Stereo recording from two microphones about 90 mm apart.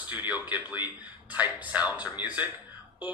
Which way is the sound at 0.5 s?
15° right (ahead or behind).